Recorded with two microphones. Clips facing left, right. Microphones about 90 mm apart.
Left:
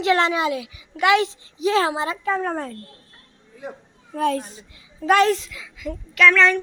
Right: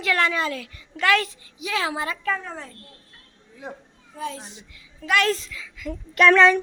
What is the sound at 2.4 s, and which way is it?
Speech, 50° left (ahead or behind).